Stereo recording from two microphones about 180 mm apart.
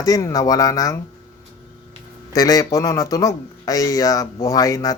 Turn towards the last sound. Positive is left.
turn(degrees=20)  # may be behind; listen again after turning